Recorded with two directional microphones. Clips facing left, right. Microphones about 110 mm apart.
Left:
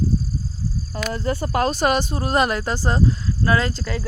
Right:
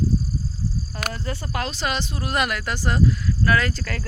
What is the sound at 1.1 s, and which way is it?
Speech, 40° left (ahead or behind).